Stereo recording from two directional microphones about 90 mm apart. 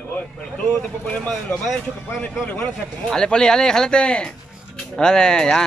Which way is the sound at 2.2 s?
15° left (ahead or behind).